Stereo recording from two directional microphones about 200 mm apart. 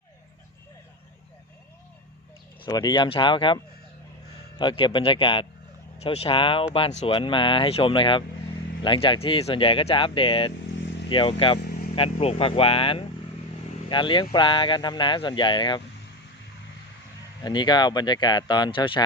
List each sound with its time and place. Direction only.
2.6 s speech: 20° left (ahead or behind)
17.4 s speech: 20° left (ahead or behind)